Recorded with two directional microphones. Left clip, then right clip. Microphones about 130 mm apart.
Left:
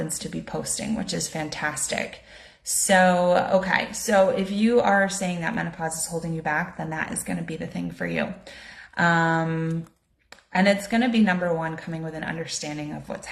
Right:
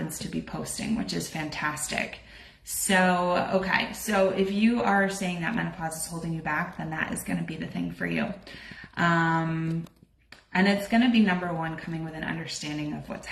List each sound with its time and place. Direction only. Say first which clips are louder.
0.3 s speech: left 4 dB; 40° left (ahead or behind)